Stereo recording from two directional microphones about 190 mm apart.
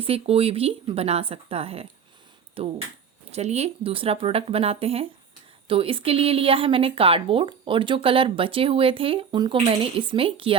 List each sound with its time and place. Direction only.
0.0 s a woman's voice: 30° right (ahead or behind)